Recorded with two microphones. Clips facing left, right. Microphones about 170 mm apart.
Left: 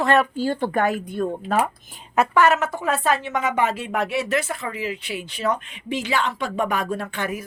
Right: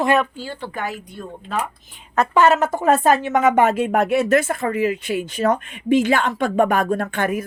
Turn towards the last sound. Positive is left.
turn(degrees=-55)  # may be behind; listen again after turning